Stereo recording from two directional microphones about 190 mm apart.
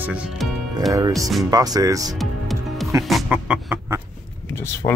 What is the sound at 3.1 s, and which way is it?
Music, 5° right (ahead or behind).